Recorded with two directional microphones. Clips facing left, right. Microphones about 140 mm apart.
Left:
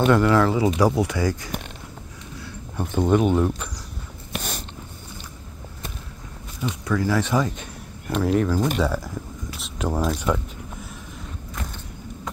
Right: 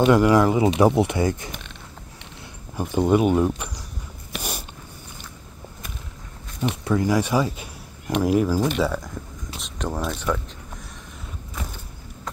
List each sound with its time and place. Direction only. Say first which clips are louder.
0.0 s speech: right 2 dB; 15° right (ahead or behind)
2.8 s speech: right 1 dB; 10° right (ahead or behind)
4.4 s a sound: right 1 dB; 10° right (ahead or behind)
6.8 s speech: right 1 dB; 25° right (ahead or behind)
7.1 s speech: even; 10° right (ahead or behind); by 9.2 s 5° left (ahead or behind)
9.6 s a sound: left 3 dB; 10° left (ahead or behind)